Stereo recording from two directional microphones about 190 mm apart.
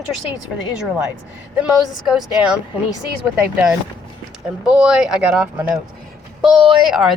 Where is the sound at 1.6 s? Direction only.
5° right (ahead or behind).